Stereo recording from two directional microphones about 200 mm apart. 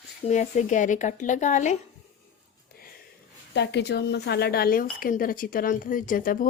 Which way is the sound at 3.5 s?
60° left (ahead or behind).